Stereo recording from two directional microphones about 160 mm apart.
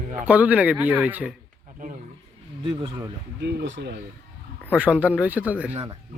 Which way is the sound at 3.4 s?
90° right.